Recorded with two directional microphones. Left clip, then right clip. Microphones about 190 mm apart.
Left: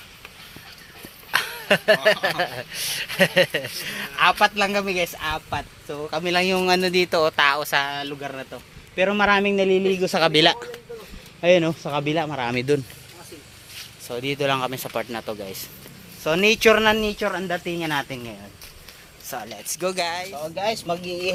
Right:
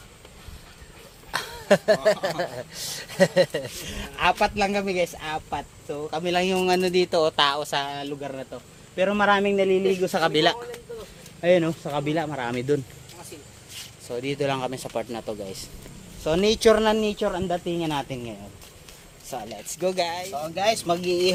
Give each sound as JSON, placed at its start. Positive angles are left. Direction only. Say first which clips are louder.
{"t": 1.3, "sound": "a sound", "louder": "left 1 dB", "side_deg": 10}
{"t": 2.0, "sound": "speech", "louder": "left 3 dB", "side_deg": 10}
{"t": 5.5, "sound": "speech", "louder": "left 2 dB", "side_deg": 25}
{"t": 9.0, "sound": "a man's voice", "louder": "left 2 dB", "side_deg": 35}
{"t": 14.1, "sound": "speech", "louder": "left 3 dB", "side_deg": 25}
{"t": 17.2, "sound": "speech", "louder": "left 1 dB", "side_deg": 20}
{"t": 17.7, "sound": "speech", "louder": "left 2 dB", "side_deg": 5}